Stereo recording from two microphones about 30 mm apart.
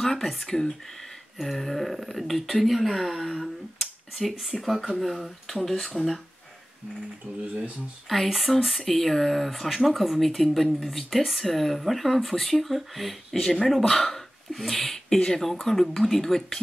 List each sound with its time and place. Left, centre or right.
0.4 s speech: centre
1.4 s speech: centre
7.3 s speech: right
8.3 s speech: centre
15.0 s speech: centre